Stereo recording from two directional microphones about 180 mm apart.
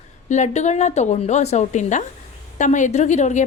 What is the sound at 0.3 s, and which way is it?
A woman's voice, 40° left (ahead or behind).